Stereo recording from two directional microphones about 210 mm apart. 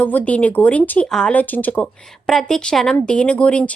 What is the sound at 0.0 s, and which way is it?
Speech, 5° left (ahead or behind).